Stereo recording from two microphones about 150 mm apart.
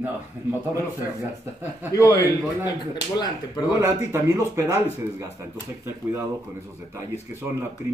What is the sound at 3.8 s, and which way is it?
Speech, 15° right (ahead or behind).